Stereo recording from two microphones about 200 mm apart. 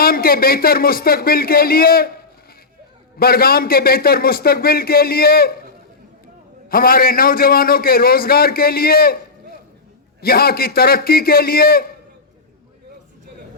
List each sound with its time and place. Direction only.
0.0 s a man's voice: 50° left (ahead or behind)
3.2 s a man's voice: 50° left (ahead or behind)
6.7 s a man's voice: 45° left (ahead or behind)